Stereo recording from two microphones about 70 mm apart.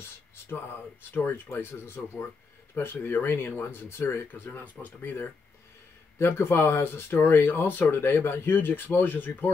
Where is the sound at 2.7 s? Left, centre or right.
Left.